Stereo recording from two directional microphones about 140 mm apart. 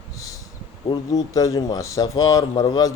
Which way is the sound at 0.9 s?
25° left (ahead or behind).